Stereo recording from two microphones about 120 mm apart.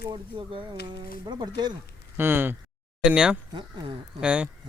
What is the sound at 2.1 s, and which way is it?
Speech, 15° right (ahead or behind).